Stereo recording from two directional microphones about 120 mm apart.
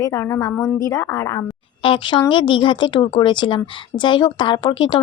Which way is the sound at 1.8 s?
45° left (ahead or behind).